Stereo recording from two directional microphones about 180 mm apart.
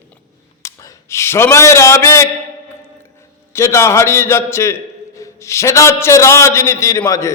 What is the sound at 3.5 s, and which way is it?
A man's voice, 15° left (ahead or behind).